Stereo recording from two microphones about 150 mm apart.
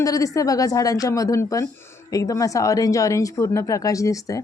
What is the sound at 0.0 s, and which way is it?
Speech, 25° left (ahead or behind).